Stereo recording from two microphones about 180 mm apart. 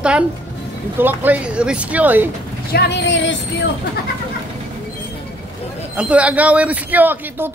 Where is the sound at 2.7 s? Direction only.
70° left (ahead or behind); by 3.7 s 85° left.